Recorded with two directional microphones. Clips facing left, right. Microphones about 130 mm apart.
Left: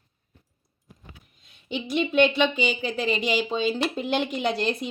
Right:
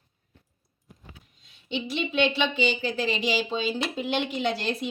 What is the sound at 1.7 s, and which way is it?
A woman's voice, 45° left (ahead or behind).